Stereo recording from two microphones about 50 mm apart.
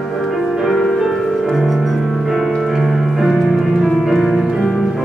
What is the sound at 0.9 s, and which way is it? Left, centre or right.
Music, centre.